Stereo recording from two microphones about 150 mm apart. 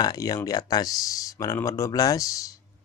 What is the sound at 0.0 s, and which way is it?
Speech, 25° left (ahead or behind).